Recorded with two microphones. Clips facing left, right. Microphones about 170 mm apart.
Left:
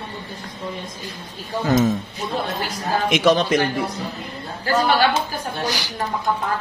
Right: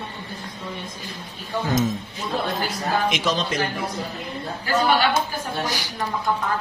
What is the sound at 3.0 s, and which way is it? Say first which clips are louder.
Speech: left 6 dB; 60° left (ahead or behind).